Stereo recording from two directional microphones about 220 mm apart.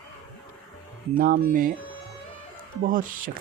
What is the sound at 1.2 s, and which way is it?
Speech, 40° right (ahead or behind).